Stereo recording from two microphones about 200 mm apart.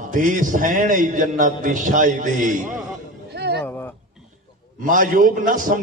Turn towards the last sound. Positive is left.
turn(degrees=-45)  # may be behind; listen again after turning